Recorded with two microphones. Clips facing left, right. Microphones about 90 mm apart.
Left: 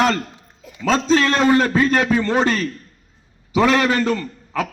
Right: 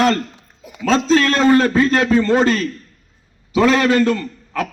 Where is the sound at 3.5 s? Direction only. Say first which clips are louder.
Right 2 dB; 5° left (ahead or behind).